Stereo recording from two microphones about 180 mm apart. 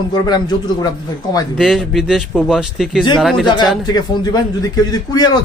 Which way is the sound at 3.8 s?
20° left (ahead or behind).